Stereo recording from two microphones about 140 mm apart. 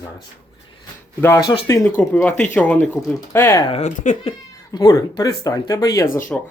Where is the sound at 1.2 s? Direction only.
15° left (ahead or behind).